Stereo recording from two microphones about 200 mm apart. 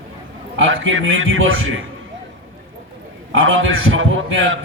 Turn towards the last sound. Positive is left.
turn(degrees=-80)